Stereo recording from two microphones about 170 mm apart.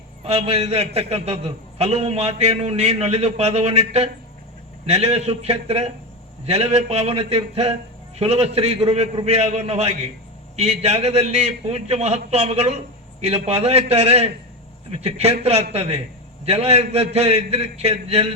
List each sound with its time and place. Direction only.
0.3 s a man's voice: 35° right (ahead or behind)